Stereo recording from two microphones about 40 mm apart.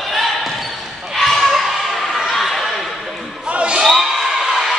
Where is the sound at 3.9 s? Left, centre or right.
Centre.